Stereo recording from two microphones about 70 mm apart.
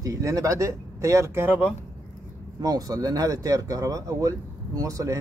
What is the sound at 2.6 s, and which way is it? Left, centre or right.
A man's voice, right.